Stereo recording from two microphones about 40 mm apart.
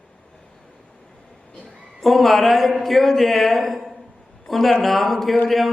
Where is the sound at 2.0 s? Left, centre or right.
Centre.